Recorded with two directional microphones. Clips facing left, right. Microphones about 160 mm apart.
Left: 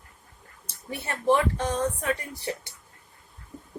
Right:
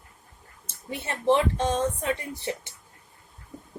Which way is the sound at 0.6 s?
20° right (ahead or behind).